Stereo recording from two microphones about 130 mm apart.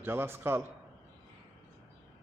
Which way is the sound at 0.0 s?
15° right (ahead or behind).